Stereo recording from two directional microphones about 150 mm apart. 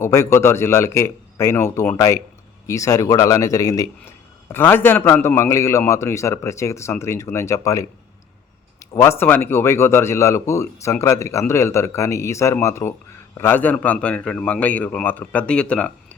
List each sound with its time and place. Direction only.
0.0 s a man's voice: 15° left (ahead or behind)